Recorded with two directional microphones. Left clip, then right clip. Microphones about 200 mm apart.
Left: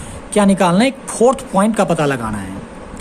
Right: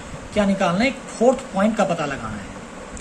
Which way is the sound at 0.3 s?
60° left (ahead or behind).